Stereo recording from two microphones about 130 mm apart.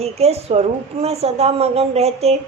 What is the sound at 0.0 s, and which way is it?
A woman's voice, 55° right (ahead or behind).